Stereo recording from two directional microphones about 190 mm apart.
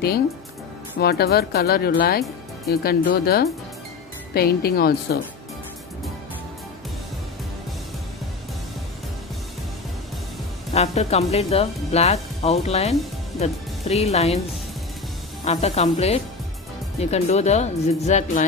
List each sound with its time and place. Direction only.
0.9 s speech: 55° left (ahead or behind)
10.7 s speech: 35° left (ahead or behind)
15.4 s speech: 35° left (ahead or behind)